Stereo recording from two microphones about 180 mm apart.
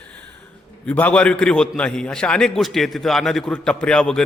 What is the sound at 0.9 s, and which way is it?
A man's voice, 10° left (ahead or behind).